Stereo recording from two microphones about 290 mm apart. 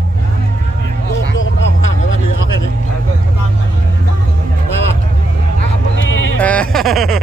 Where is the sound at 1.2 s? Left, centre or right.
Left.